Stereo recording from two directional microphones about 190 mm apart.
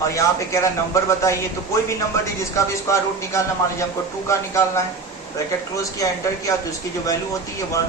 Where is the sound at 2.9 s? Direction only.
15° left (ahead or behind).